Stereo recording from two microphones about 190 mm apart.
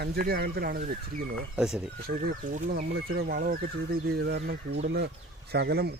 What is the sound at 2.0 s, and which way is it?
Speech, 55° right (ahead or behind).